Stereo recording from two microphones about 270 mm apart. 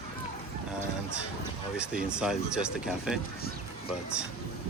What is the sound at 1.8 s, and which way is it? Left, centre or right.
Speech, centre.